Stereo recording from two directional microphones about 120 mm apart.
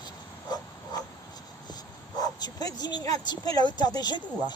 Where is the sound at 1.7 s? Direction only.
35° left (ahead or behind).